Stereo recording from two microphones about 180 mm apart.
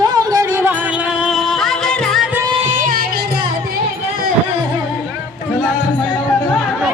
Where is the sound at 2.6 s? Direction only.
45° right (ahead or behind).